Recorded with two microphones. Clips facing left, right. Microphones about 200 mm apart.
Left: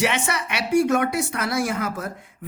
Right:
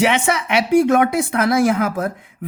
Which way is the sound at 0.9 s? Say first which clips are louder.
Right 6 dB; 55° right (ahead or behind).